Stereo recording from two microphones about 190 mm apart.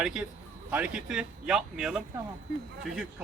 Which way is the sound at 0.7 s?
5° right (ahead or behind).